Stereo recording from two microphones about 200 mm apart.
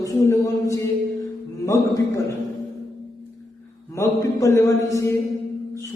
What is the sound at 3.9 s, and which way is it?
A man's voice, 15° left (ahead or behind).